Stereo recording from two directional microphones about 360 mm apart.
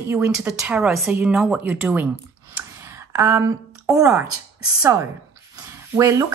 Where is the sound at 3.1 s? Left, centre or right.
Centre.